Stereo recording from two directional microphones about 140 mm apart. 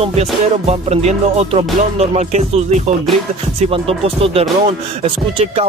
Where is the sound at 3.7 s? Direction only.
45° right (ahead or behind).